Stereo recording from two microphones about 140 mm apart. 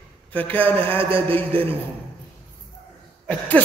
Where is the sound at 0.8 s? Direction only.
40° right (ahead or behind).